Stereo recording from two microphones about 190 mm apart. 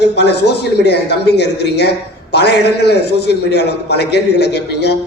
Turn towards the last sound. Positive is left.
turn(degrees=60)  # may be behind; listen again after turning